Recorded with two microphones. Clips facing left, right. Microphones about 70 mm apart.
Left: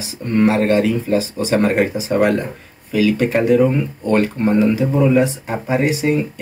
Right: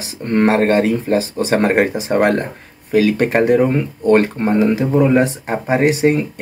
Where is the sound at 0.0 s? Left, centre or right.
Right.